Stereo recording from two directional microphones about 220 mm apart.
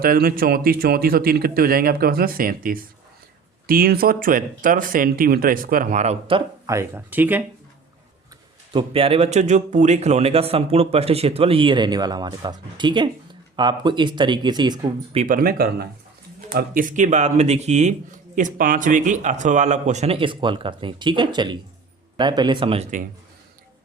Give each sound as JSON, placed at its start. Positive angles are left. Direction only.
{"t": 0.0, "sound": "speech", "side_deg": -40}
{"t": 8.7, "sound": "speech", "side_deg": -25}
{"t": 15.2, "sound": "speech", "side_deg": -40}